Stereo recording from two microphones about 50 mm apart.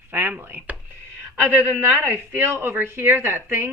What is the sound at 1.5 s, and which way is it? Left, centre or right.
A woman's voice, right.